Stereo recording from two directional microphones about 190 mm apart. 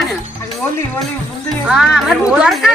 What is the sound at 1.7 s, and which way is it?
Speech, 5° right (ahead or behind).